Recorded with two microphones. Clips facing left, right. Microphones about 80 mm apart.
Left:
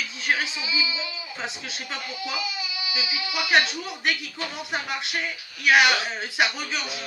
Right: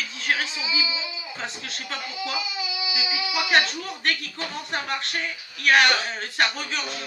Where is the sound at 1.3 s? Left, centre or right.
Centre.